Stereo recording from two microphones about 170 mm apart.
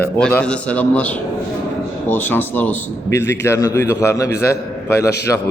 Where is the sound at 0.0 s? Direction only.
5° left (ahead or behind).